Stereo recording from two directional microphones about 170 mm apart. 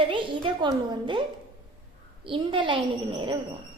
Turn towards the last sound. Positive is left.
turn(degrees=-30)  # may be behind; listen again after turning